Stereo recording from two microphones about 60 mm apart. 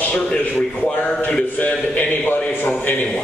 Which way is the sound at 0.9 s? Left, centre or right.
Left.